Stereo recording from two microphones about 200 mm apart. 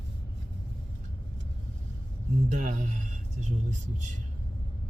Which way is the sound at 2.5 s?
35° right (ahead or behind).